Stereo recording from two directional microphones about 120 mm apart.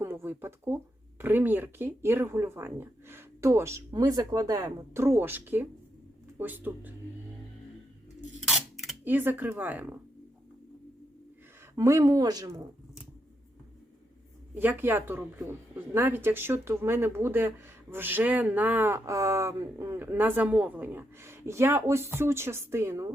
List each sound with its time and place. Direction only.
0.0 s a sound: 20° right (ahead or behind)
1.2 s speech: 15° right (ahead or behind)
8.4 s camera: centre (ahead or behind)
9.0 s speech: 15° right (ahead or behind)
11.8 s speech: 25° right (ahead or behind)
14.5 s speech: 15° right (ahead or behind)